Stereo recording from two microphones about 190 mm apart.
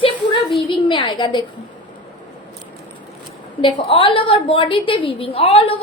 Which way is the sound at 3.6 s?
30° left (ahead or behind).